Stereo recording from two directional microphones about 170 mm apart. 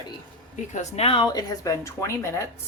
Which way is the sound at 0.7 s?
40° left (ahead or behind).